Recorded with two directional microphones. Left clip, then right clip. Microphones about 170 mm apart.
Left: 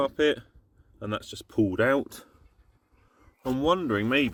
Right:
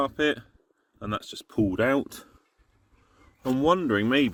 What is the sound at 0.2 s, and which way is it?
Speech, 30° right (ahead or behind).